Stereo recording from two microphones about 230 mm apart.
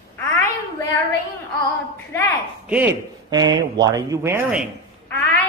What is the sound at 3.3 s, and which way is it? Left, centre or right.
Speech, centre.